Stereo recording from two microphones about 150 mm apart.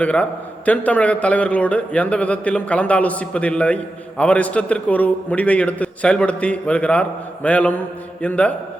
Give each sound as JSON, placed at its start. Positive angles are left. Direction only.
{"t": 0.0, "sound": "a man's voice", "side_deg": 10}